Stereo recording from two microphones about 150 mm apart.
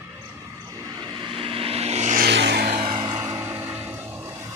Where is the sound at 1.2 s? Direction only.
35° right (ahead or behind).